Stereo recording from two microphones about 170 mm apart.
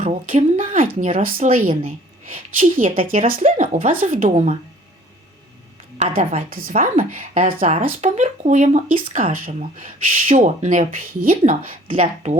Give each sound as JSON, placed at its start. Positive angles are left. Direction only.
{"t": 0.0, "sound": "speech", "side_deg": -45}
{"t": 6.0, "sound": "a woman's voice", "side_deg": -50}
{"t": 11.9, "sound": "speech", "side_deg": -40}